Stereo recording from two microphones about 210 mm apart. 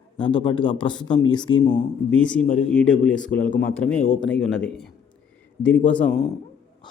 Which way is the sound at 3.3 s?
45° left (ahead or behind).